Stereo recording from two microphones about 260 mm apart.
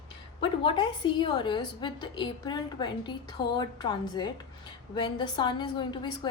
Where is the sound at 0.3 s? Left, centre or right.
Centre.